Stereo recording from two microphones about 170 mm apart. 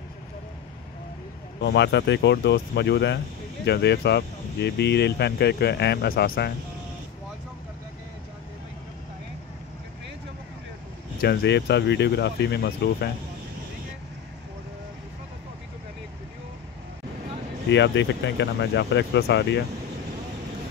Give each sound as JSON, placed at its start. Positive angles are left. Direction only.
{"t": 1.6, "sound": "speech", "side_deg": 85}
{"t": 11.1, "sound": "speech", "side_deg": 80}
{"t": 17.6, "sound": "speech", "side_deg": 90}